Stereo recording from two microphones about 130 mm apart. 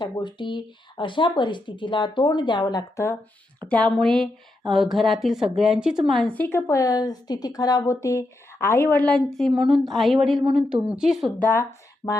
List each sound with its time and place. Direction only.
0.0 s speech: 35° left (ahead or behind); by 3.2 s 20° left (ahead or behind)
3.6 s speech: 10° left (ahead or behind)
6.3 s speech: 15° left (ahead or behind); by 11.3 s centre (ahead or behind)
11.3 s speech: 15° left (ahead or behind)